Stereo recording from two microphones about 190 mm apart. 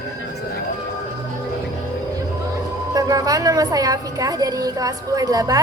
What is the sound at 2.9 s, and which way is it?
A woman's voice, 20° right (ahead or behind).